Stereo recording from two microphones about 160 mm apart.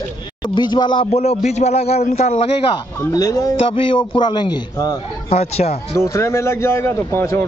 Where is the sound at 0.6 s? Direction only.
30° left (ahead or behind).